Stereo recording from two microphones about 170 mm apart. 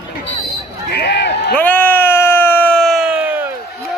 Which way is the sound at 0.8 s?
75° left (ahead or behind).